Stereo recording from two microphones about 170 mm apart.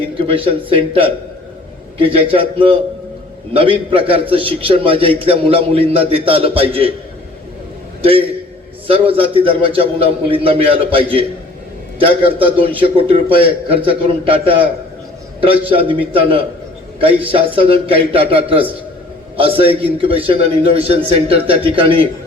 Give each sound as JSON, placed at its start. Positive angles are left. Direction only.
{"t": 0.2, "sound": "a man's voice", "side_deg": -30}
{"t": 8.9, "sound": "a man's voice", "side_deg": -35}